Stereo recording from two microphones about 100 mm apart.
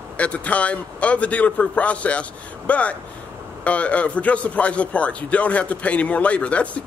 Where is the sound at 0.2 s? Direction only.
15° left (ahead or behind).